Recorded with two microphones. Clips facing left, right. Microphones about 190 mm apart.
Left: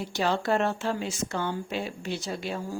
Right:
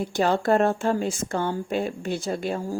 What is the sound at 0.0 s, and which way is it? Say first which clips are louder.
Speech: right 5 dB; 50° right (ahead or behind).